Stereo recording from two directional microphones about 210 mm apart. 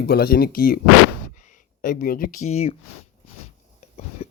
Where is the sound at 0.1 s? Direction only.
45° left (ahead or behind).